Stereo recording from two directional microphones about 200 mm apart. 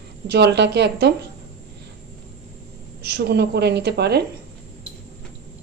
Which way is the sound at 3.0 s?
55° right (ahead or behind).